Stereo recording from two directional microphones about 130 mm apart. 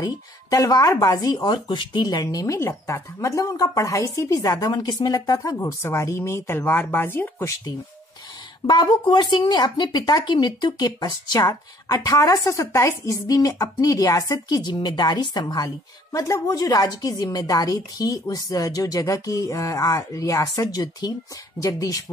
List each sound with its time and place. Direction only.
0.0 s speech: 25° left (ahead or behind)
2.2 s speech: 25° left (ahead or behind)
8.6 s speech: 35° left (ahead or behind)